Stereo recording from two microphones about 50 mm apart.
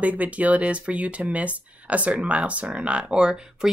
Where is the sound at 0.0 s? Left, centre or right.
Right.